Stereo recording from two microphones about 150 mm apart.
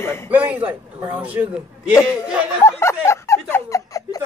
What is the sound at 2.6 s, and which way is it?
Speech, 20° left (ahead or behind).